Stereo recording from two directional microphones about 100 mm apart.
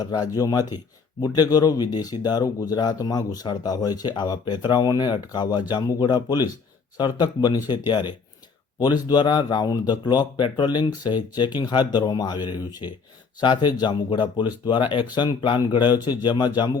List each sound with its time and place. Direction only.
0.0 s speech: 40° left (ahead or behind)